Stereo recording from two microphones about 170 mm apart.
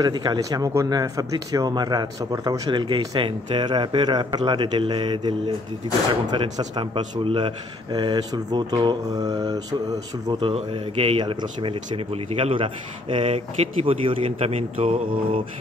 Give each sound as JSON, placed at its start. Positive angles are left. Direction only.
{"t": 0.0, "sound": "speech", "side_deg": -25}
{"t": 6.3, "sound": "speech", "side_deg": -30}
{"t": 10.4, "sound": "speech", "side_deg": -35}